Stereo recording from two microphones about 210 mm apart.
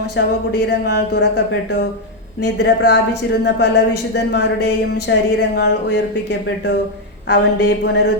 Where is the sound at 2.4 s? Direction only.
55° left (ahead or behind).